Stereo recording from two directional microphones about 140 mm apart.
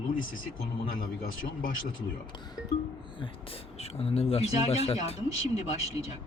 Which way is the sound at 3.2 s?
45° left (ahead or behind).